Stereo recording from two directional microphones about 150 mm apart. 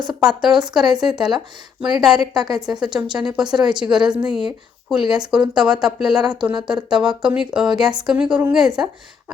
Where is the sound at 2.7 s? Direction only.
30° right (ahead or behind).